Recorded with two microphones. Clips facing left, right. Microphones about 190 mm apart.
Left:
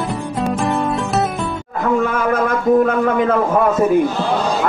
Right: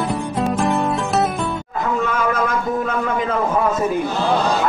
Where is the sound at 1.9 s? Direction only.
55° left (ahead or behind).